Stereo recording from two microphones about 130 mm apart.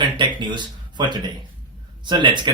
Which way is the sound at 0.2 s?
35° right (ahead or behind).